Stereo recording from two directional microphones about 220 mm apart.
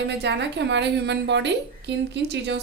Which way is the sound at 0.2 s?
50° right (ahead or behind).